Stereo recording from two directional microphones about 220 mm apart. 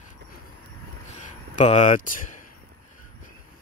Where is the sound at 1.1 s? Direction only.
30° left (ahead or behind).